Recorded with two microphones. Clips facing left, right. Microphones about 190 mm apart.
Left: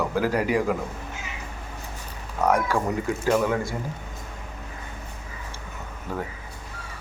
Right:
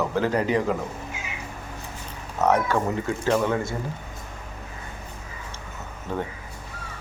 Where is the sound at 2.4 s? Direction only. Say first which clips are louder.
Right 1 dB; 5° right (ahead or behind).